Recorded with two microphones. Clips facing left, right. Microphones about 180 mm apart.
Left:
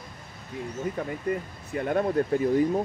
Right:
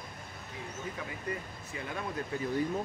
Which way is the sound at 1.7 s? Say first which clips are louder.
Left 13 dB; 55° left (ahead or behind).